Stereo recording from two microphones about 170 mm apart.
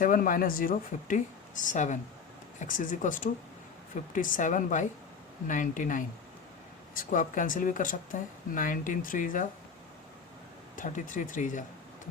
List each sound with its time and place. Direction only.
0.0 s speech: 50° left (ahead or behind)
10.8 s speech: 45° left (ahead or behind)